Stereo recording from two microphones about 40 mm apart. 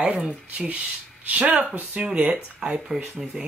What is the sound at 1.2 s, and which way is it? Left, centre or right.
Speech, right.